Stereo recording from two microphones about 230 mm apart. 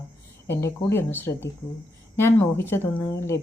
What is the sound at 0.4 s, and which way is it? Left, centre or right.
A woman's voice, centre.